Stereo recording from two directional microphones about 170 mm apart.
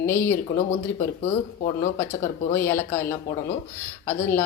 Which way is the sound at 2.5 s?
15° left (ahead or behind).